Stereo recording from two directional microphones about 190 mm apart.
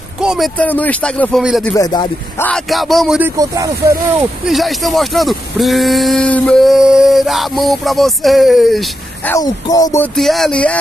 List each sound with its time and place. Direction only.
0.2 s a sound: 5° right (ahead or behind)
0.6 s speech: 10° left (ahead or behind)
1.7 s speech: 20° left (ahead or behind)
2.4 s speech: centre (ahead or behind); by 4.3 s 15° right (ahead or behind)
4.5 s speech: centre (ahead or behind)
9.3 s speech: 20° left (ahead or behind)
10.1 s speech: centre (ahead or behind)